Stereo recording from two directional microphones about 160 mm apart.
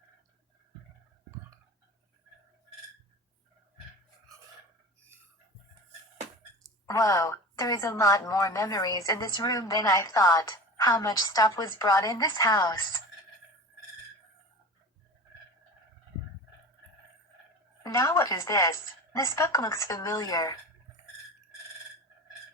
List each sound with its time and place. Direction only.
6.8 s a woman's voice: 20° left (ahead or behind)
17.8 s a woman's voice: 20° left (ahead or behind)